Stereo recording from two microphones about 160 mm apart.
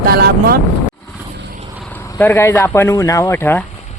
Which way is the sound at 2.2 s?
15° left (ahead or behind).